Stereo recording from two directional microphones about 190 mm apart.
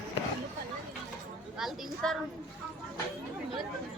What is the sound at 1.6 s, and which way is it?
Speech, centre (ahead or behind).